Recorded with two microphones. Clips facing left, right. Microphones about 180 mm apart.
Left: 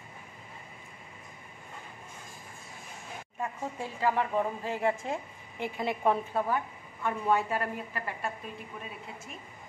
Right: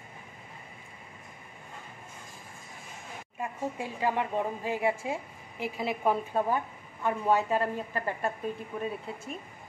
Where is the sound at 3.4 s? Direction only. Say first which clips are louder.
Right 2 dB; 15° right (ahead or behind).